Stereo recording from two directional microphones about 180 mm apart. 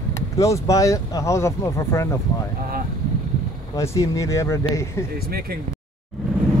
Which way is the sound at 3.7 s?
15° left (ahead or behind).